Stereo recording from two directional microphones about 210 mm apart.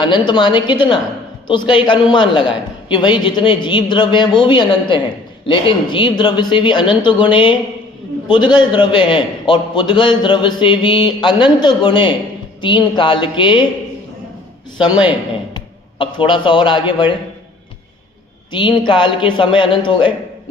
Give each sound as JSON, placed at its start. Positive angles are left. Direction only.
{"t": 0.0, "sound": "a man's voice", "side_deg": 20}
{"t": 14.8, "sound": "a man's voice", "side_deg": -5}
{"t": 15.5, "sound": "a man's voice", "side_deg": 20}
{"t": 18.9, "sound": "a man's voice", "side_deg": 20}